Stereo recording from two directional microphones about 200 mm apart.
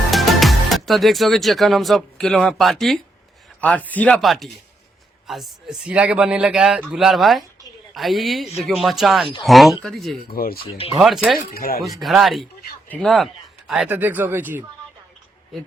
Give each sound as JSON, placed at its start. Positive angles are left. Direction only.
{"t": 0.1, "sound": "speech", "side_deg": 0}
{"t": 10.3, "sound": "speech", "side_deg": 50}
{"t": 11.0, "sound": "speech", "side_deg": 0}
{"t": 11.5, "sound": "speech", "side_deg": 50}
{"t": 11.8, "sound": "speech", "side_deg": 0}